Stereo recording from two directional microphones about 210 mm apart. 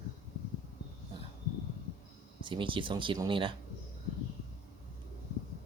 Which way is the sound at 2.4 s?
25° right (ahead or behind).